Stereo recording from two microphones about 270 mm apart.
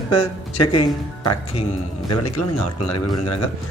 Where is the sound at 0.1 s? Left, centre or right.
Left.